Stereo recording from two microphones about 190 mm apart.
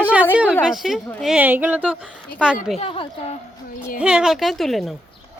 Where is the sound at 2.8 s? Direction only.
30° left (ahead or behind).